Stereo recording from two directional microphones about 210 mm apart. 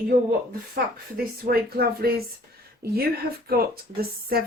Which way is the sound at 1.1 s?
45° right (ahead or behind).